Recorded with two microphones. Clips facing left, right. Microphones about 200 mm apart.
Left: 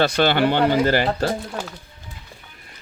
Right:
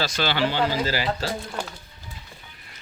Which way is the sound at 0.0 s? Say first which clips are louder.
Left 7 dB; 55° left (ahead or behind).